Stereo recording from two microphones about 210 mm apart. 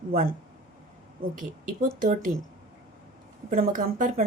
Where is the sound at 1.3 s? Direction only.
40° right (ahead or behind).